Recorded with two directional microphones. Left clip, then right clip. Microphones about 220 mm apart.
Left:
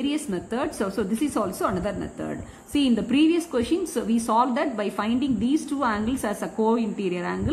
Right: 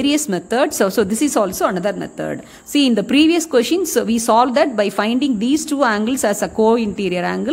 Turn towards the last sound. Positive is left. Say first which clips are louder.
# right 8 dB
turn(degrees=-50)  # may be behind; listen again after turning